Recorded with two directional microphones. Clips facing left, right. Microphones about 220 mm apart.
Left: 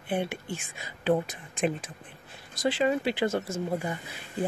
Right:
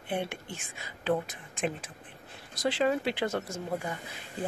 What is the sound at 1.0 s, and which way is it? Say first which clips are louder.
Speech: left 4 dB; 15° left (ahead or behind).